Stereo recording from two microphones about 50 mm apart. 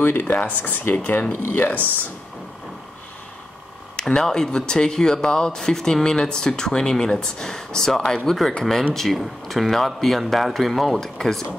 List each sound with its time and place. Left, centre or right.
0.0 s speech: left
4.1 s speech: centre